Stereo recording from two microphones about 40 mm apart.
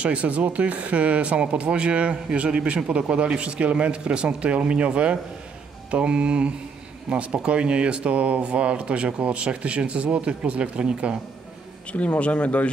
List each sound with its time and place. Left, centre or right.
0.0 s speech: right
11.9 s speech: left